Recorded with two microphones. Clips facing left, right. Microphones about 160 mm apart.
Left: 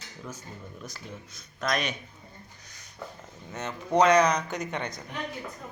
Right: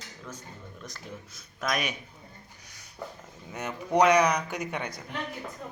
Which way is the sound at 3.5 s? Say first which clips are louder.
Left 1 dB; 15° right (ahead or behind).